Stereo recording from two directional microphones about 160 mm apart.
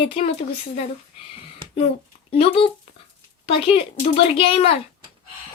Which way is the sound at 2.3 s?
35° left (ahead or behind).